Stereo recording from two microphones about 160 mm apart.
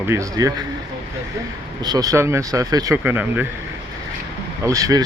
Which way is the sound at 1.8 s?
25° right (ahead or behind).